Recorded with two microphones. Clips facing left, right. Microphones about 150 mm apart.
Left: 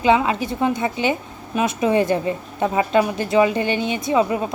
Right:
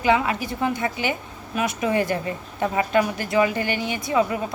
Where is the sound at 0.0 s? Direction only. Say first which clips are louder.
Left 3 dB; 25° left (ahead or behind).